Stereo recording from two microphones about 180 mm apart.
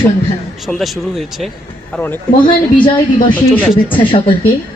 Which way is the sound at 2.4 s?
25° left (ahead or behind).